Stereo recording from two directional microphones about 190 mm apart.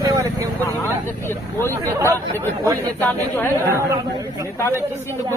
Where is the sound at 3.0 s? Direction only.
10° left (ahead or behind).